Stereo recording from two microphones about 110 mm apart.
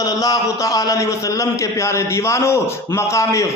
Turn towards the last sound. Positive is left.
turn(degrees=30)  # may be behind; listen again after turning